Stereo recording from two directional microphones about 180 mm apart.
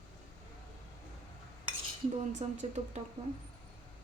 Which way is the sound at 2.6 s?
40° right (ahead or behind).